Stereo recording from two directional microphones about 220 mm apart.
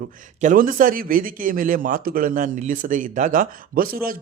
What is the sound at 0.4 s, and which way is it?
A man's voice, 40° right (ahead or behind).